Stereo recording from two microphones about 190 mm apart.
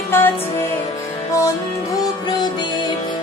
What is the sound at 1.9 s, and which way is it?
Music, 25° left (ahead or behind).